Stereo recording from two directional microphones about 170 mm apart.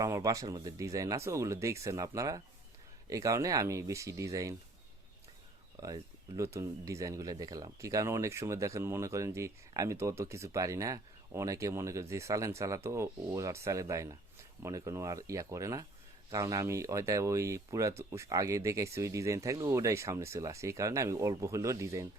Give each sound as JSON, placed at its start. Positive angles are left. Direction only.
{"t": 0.0, "sound": "speech", "side_deg": -20}
{"t": 5.8, "sound": "speech", "side_deg": -20}